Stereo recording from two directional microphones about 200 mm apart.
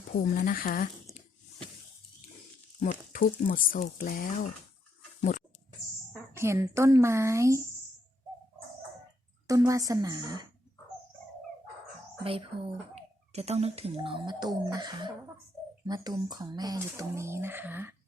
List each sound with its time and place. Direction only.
0.1 s speech: 45° left (ahead or behind)
2.8 s speech: 45° left (ahead or behind)
6.3 s speech: 15° right (ahead or behind)
9.5 s speech: 15° right (ahead or behind)
13.0 s speech: 30° right (ahead or behind); by 17.9 s 10° right (ahead or behind)